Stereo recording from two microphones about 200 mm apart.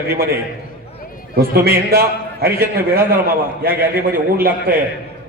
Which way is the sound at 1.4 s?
50° right (ahead or behind).